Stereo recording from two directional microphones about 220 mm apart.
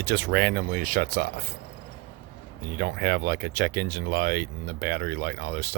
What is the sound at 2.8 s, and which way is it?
Speech, 45° right (ahead or behind).